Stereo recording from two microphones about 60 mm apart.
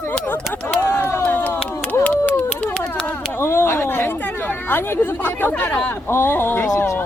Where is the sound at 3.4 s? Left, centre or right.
Left.